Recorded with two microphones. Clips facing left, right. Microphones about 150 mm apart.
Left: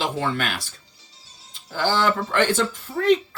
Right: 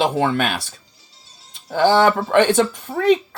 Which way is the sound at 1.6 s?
65° right (ahead or behind).